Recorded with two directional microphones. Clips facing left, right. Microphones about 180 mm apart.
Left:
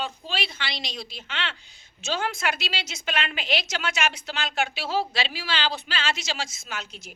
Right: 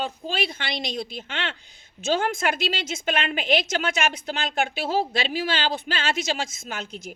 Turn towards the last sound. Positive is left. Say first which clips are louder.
# right 3 dB
turn(degrees=-50)  # may be behind; listen again after turning